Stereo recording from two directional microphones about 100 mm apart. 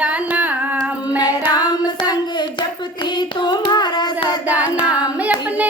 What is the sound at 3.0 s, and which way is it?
Child singing, 50° left (ahead or behind).